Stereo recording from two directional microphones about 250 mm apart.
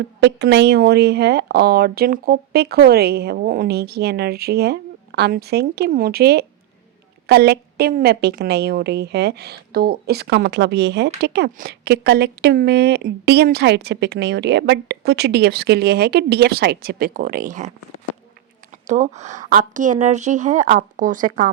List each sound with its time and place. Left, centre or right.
0.2 s speech: right
18.7 s speech: right